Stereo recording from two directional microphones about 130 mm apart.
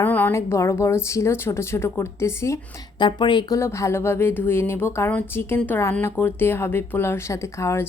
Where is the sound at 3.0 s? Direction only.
35° left (ahead or behind).